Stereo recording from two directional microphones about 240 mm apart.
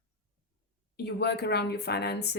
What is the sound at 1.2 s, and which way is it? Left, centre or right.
Speech, left.